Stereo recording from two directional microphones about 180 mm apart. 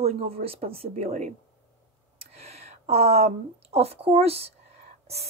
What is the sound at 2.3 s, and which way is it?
A woman's voice, 35° right (ahead or behind).